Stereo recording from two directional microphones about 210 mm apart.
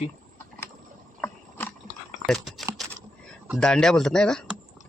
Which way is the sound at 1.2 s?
10° left (ahead or behind).